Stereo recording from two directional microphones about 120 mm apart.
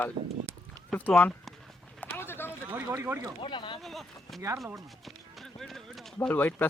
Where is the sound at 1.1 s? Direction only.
5° left (ahead or behind).